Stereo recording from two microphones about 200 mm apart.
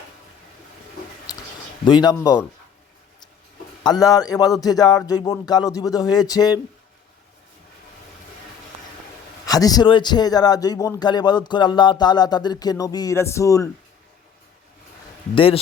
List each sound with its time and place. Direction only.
1.3 s a sound: 20° left (ahead or behind)
1.8 s a man's voice: 20° left (ahead or behind)
3.8 s a man's voice: 20° left (ahead or behind)
9.5 s a man's voice: 20° left (ahead or behind)